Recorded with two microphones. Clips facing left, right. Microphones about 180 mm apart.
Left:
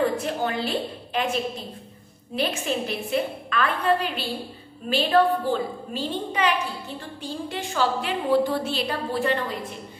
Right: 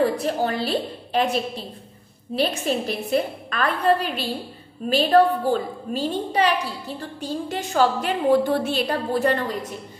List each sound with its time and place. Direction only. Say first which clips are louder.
0.0 s a woman's voice: right 3 dB; 35° right (ahead or behind)